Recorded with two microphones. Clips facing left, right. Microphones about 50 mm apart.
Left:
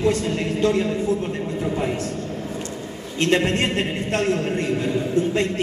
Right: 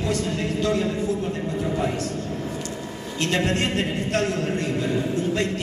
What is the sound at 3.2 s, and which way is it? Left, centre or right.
A woman's voice, left.